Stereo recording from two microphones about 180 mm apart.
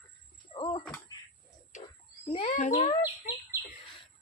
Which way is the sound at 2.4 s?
40° left (ahead or behind).